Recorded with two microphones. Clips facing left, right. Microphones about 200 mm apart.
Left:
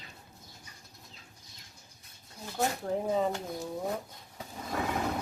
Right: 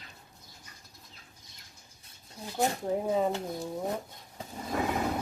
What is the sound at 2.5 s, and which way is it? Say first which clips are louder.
Speech: right 2 dB; 15° right (ahead or behind).